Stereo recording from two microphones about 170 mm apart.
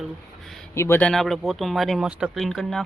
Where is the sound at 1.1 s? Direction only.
Centre (ahead or behind).